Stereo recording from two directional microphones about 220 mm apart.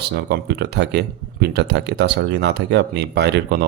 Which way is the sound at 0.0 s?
50° right (ahead or behind).